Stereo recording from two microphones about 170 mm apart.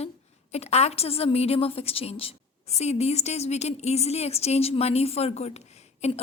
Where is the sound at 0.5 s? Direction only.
40° left (ahead or behind).